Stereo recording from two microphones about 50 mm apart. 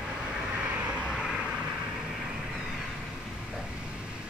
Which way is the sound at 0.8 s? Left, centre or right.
Centre.